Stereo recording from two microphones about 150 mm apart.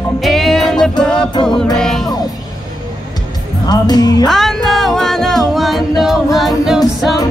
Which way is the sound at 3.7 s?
25° left (ahead or behind).